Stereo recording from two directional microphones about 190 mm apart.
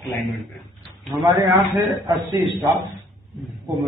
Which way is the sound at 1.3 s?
25° right (ahead or behind).